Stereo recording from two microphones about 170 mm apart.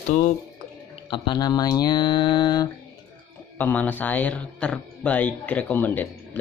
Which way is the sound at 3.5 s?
10° left (ahead or behind).